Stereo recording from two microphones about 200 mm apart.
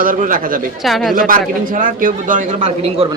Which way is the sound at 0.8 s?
Centre (ahead or behind).